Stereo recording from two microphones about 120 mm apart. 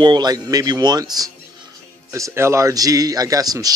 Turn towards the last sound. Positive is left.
turn(degrees=-30)  # may be behind; listen again after turning